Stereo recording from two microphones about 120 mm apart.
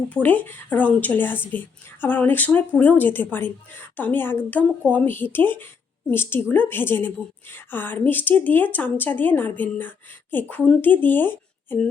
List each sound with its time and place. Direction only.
0.1 s a woman's voice: 15° left (ahead or behind)